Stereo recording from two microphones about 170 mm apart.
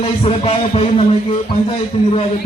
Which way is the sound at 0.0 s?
35° left (ahead or behind).